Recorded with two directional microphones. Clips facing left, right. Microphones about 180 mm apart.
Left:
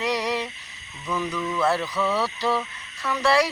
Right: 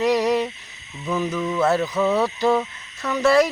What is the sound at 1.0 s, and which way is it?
Speech, 25° right (ahead or behind).